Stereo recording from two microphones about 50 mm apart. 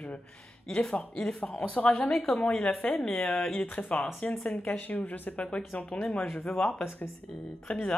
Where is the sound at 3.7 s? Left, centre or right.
Left.